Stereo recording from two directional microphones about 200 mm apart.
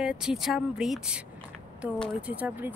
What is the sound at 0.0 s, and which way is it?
Speech, 5° right (ahead or behind).